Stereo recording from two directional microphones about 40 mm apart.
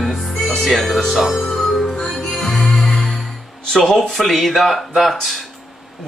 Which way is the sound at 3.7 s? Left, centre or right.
Centre.